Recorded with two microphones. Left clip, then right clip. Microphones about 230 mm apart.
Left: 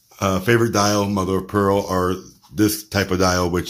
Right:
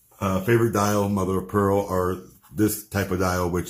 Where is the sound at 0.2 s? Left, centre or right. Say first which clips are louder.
Left 4 dB; left.